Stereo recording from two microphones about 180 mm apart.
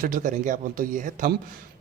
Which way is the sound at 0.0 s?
45° right (ahead or behind).